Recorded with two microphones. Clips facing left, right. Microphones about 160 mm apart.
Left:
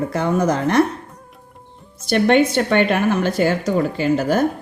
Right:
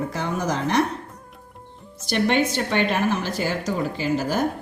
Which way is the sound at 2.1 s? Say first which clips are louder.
Left 6 dB; 60° left (ahead or behind).